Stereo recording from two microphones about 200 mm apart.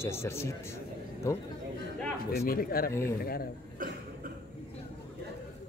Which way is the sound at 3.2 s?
50° left (ahead or behind).